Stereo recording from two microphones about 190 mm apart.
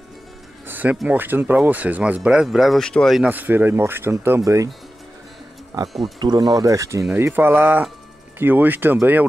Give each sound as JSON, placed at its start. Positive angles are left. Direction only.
{"t": 0.7, "sound": "speech", "side_deg": -10}
{"t": 5.7, "sound": "speech", "side_deg": -15}